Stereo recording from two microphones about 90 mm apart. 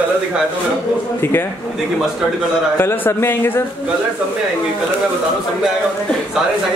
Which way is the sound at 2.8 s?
25° left (ahead or behind).